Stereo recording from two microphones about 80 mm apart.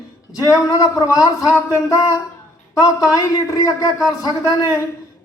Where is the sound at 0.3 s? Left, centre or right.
Left.